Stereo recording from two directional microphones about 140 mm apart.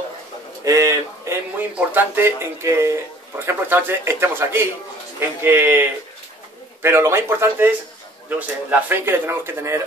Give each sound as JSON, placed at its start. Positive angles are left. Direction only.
{"t": 0.7, "sound": "a man's voice", "side_deg": -20}